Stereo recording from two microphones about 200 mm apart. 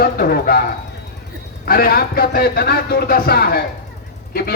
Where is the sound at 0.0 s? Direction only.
50° left (ahead or behind).